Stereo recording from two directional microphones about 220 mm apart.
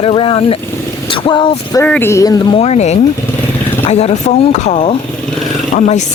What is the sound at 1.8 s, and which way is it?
Speech, 10° left (ahead or behind).